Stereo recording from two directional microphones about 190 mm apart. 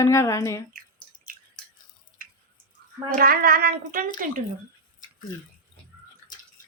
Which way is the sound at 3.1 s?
50° right (ahead or behind).